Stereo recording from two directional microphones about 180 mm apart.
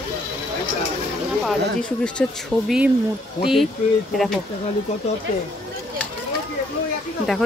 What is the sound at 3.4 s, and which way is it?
Speech, centre (ahead or behind).